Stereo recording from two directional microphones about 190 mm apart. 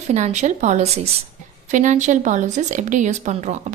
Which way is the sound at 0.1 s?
35° right (ahead or behind).